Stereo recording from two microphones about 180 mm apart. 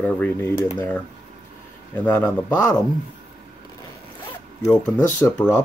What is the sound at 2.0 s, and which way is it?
Speech, 10° left (ahead or behind).